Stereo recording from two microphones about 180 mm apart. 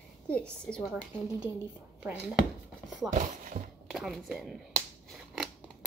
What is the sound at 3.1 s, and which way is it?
Speech, 45° right (ahead or behind).